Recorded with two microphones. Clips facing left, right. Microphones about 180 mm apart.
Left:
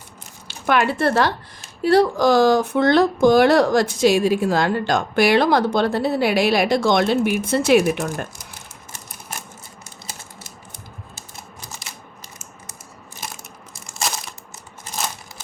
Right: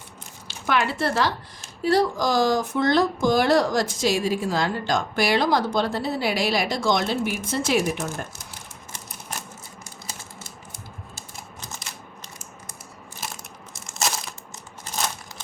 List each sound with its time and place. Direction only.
0.4 s speech: 55° left (ahead or behind)
13.9 s crushing: centre (ahead or behind)